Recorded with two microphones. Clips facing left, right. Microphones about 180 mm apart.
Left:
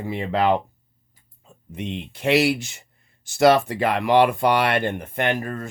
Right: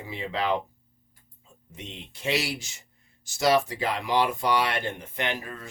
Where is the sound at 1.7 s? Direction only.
60° left (ahead or behind).